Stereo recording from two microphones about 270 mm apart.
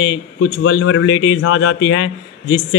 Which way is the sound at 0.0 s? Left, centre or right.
Left.